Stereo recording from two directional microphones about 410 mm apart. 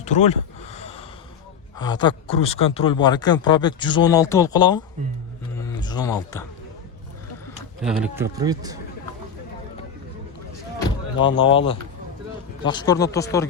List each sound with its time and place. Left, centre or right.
0.0 s a sound: centre
1.8 s speech: centre
5.5 s a sound: centre
7.8 s a man's voice: centre
10.8 s door: centre
12.6 s speech: centre